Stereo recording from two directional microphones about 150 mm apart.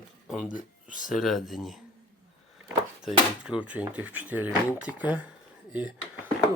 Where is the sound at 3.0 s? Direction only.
5° right (ahead or behind).